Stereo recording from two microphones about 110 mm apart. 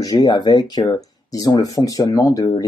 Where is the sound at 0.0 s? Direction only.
40° left (ahead or behind).